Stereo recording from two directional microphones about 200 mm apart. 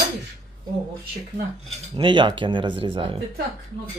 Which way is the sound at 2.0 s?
25° right (ahead or behind).